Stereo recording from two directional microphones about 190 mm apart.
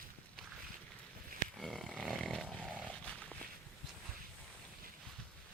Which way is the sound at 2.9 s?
5° left (ahead or behind).